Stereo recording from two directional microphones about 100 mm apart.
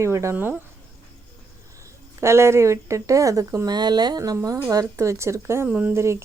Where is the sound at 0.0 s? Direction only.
30° right (ahead or behind).